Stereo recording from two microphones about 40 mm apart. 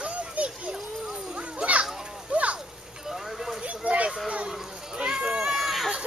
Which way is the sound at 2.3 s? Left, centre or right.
Right.